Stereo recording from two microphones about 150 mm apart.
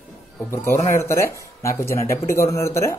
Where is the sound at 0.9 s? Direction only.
20° left (ahead or behind).